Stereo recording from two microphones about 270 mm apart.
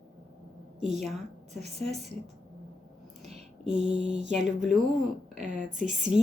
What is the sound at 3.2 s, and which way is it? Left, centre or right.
Speech, right.